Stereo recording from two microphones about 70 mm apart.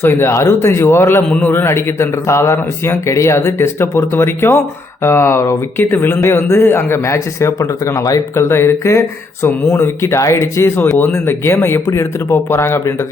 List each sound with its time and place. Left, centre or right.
0.0 s speech: left
1.3 s speech: left
5.8 s speech: left
8.4 s speech: left
10.8 s speech: left